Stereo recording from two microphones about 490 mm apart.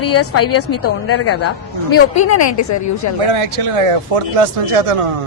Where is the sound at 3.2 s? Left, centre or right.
Right.